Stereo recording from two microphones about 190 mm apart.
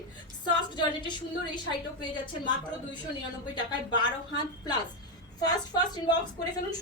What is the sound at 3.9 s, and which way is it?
A woman's voice, 20° left (ahead or behind).